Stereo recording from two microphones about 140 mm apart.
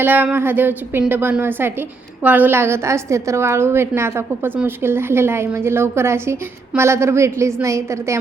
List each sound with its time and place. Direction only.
0.0 s a woman's voice: 15° right (ahead or behind)